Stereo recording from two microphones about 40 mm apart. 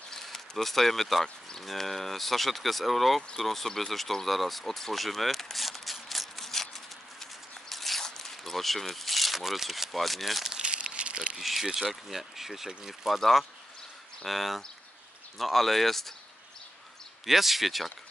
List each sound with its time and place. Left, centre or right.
0.2 s speech: centre
3.2 s speech: centre
7.7 s zipper: centre
10.5 s crumpling: right
11.3 s speech: centre
13.2 s speech: centre
17.3 s speech: centre